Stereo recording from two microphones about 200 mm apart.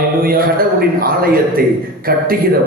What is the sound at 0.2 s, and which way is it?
A man's voice, 45° right (ahead or behind).